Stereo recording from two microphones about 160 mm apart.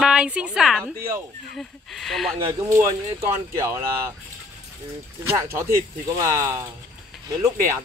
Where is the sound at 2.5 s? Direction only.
20° right (ahead or behind).